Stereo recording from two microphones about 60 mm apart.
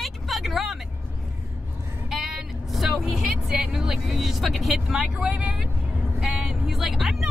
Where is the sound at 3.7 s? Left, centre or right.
Centre.